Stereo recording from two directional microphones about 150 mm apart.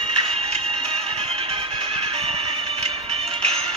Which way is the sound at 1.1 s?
40° right (ahead or behind).